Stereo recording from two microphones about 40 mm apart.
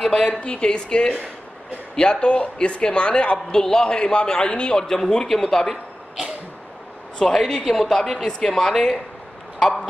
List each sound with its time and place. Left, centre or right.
0.0 s a sound: centre
0.3 s a man's voice: left
3.5 s speech: centre
3.8 s a man's voice: left
4.7 s speech: centre
7.2 s speech: centre